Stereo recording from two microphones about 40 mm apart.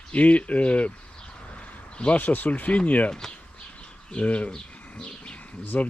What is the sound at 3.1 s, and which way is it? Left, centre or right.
Speech, centre.